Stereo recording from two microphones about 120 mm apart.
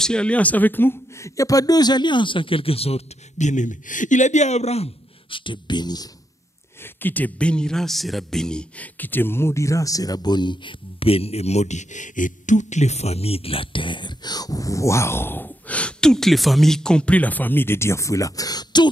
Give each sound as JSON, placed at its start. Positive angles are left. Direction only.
{"t": 0.0, "sound": "speech", "side_deg": 5}
{"t": 5.3, "sound": "speech", "side_deg": 45}
{"t": 6.8, "sound": "speech", "side_deg": 15}